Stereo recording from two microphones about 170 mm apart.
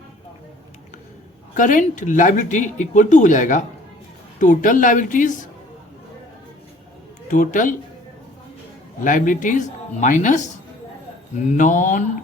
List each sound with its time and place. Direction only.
1.5 s speech: 50° left (ahead or behind)
7.3 s speech: 50° left (ahead or behind)
9.0 s speech: 50° left (ahead or behind)
11.4 s speech: 50° left (ahead or behind)